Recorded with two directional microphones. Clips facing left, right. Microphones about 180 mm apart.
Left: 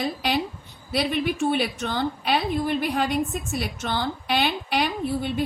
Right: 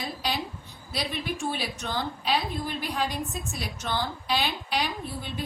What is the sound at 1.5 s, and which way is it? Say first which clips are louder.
A woman's voice: left 7 dB; 60° left (ahead or behind).